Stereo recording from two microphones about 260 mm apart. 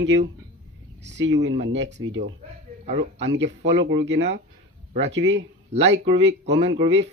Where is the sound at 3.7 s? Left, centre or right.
Right.